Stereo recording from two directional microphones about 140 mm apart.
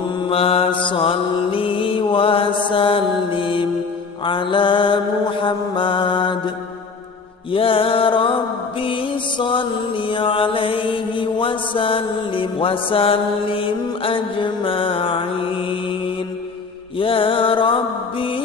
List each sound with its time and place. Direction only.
0.3 s mantra: 45° left (ahead or behind)
7.5 s music: 40° left (ahead or behind)
8.8 s mantra: 35° left (ahead or behind)
17.0 s music: 40° left (ahead or behind)